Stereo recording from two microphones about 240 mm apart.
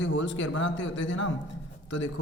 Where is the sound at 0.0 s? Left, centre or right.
Left.